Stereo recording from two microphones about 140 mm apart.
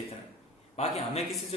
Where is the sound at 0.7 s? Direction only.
50° left (ahead or behind).